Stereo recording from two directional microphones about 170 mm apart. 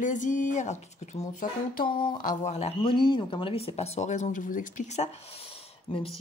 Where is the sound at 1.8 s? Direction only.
55° left (ahead or behind).